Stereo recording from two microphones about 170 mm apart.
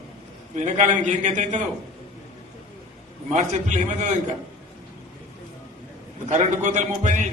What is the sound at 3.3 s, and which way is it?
Speech, 45° right (ahead or behind).